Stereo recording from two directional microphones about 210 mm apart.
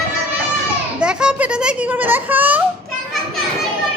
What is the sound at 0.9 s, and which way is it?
A woman's voice, 5° right (ahead or behind).